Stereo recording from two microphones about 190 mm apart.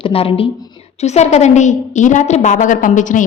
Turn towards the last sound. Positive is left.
turn(degrees=40)  # may be behind; listen again after turning